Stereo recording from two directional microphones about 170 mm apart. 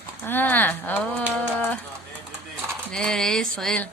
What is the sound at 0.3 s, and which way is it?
Speech, 10° left (ahead or behind).